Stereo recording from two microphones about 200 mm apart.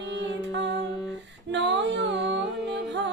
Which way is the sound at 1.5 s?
60° right (ahead or behind).